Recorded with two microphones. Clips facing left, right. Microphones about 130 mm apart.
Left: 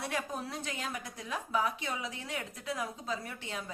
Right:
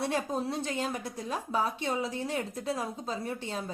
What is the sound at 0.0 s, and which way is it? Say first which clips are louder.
A woman's voice: right 6 dB; 30° right (ahead or behind).